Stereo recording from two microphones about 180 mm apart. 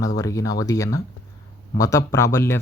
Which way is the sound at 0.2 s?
20° left (ahead or behind).